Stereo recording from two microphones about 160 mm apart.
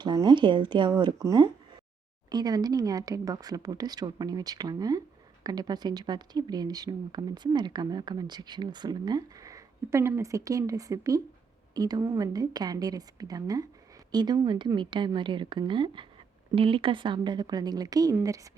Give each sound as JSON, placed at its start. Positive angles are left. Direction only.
{"t": 0.0, "sound": "speech", "side_deg": -25}